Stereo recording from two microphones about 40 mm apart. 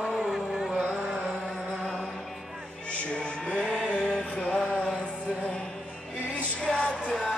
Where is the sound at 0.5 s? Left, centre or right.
Centre.